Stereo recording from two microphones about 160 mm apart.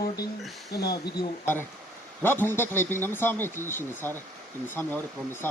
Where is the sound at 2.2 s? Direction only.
15° left (ahead or behind).